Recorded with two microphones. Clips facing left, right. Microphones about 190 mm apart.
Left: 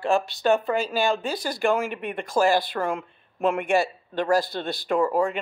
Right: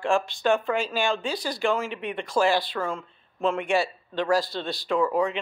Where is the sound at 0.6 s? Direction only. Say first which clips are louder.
Left 2 dB; 35° left (ahead or behind).